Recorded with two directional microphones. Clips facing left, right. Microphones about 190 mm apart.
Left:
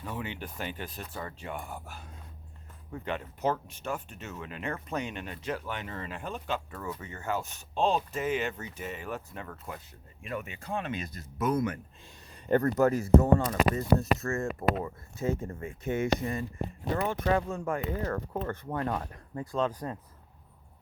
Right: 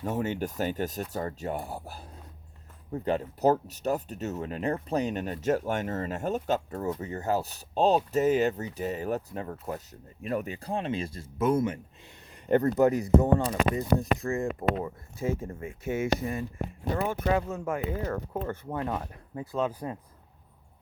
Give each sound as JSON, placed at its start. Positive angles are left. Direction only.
{"t": 0.0, "sound": "speech", "side_deg": -45}